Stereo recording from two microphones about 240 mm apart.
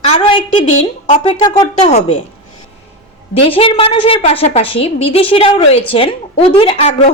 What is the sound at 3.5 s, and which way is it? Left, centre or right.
A woman's voice, left.